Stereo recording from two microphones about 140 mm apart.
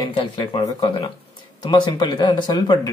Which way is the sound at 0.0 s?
35° left (ahead or behind).